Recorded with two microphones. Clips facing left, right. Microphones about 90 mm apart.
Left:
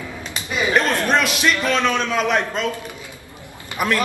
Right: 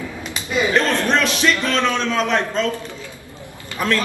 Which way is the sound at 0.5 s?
20° left (ahead or behind).